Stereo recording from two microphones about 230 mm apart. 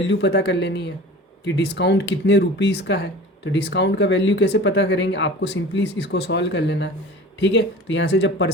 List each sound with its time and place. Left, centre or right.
0.1 s speech: left